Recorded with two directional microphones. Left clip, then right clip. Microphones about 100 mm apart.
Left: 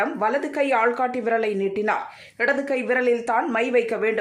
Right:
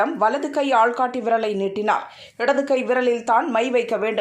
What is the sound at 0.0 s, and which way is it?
Speech, 5° right (ahead or behind).